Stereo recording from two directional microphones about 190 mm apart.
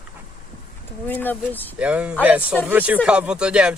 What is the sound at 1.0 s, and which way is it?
Speech, 10° left (ahead or behind).